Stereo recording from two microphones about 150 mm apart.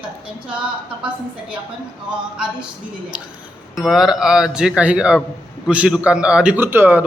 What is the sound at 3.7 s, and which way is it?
A man's voice, centre (ahead or behind).